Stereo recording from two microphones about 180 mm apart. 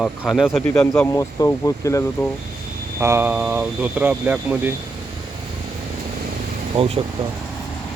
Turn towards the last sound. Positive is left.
turn(degrees=-30)  # may be behind; listen again after turning